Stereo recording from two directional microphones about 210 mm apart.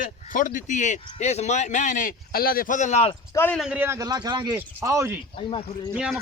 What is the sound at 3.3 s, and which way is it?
Speech, 10° left (ahead or behind).